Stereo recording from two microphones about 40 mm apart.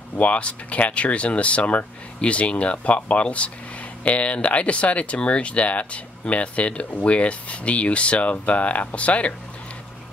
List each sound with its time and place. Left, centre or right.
0.2 s speech: left